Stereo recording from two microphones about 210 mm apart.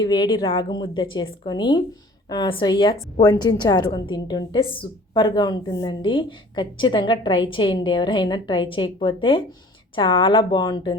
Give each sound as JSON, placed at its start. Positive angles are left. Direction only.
{"t": 0.0, "sound": "a woman's voice", "side_deg": 20}